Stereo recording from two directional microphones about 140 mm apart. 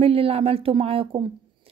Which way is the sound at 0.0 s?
45° right (ahead or behind).